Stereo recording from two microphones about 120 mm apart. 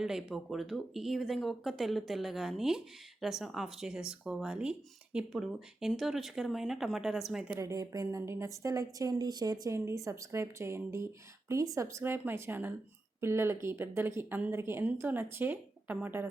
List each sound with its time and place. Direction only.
0.0 s speech: 5° right (ahead or behind)
7.6 s a woman's voice: 30° right (ahead or behind)